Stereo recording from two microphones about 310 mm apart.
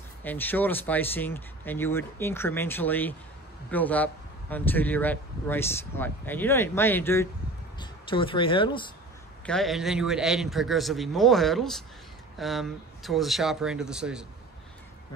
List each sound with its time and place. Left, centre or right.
0.2 s a man's voice: centre
9.5 s a man's voice: centre